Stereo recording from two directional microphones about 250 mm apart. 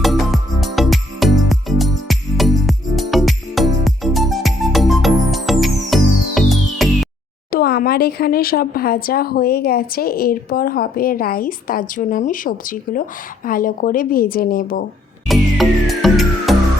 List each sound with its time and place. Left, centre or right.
0.0 s music: centre
7.5 s speech: left
15.3 s music: centre